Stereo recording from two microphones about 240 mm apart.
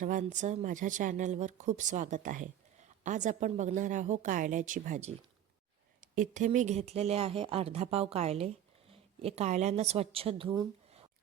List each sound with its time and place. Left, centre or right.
0.0 s speech: right
6.1 s speech: right